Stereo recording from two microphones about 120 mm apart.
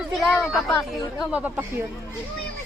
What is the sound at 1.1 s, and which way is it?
Speech, 15° right (ahead or behind).